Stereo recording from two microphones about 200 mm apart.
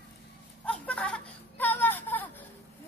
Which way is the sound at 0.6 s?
5° left (ahead or behind).